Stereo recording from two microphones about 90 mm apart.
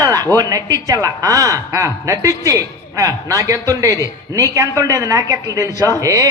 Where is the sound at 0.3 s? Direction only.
40° right (ahead or behind).